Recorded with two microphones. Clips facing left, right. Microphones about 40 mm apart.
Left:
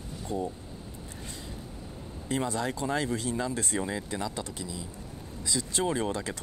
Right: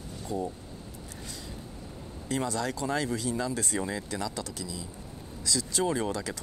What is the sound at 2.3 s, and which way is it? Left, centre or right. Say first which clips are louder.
Speech: even; left.